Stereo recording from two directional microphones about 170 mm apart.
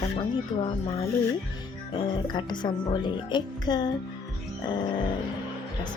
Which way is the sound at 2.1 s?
25° left (ahead or behind).